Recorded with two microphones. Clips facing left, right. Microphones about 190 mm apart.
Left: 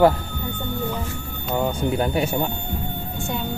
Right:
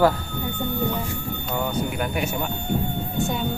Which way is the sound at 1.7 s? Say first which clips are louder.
Left 4 dB; 30° left (ahead or behind).